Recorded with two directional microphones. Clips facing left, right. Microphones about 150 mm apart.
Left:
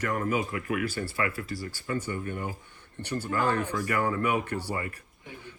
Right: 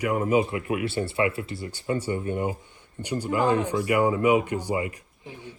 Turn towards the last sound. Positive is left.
turn(degrees=-15)  # may be behind; listen again after turning